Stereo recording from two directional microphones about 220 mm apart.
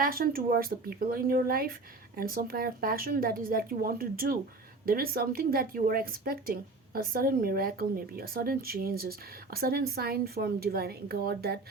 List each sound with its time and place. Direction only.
0.0 s a woman's voice: 40° right (ahead or behind)